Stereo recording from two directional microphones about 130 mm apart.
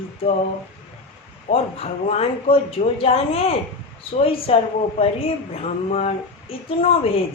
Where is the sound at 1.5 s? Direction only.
45° left (ahead or behind).